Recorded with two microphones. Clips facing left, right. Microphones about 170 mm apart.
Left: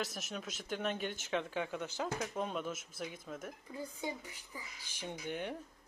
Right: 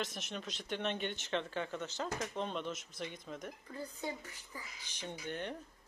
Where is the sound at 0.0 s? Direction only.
5° left (ahead or behind).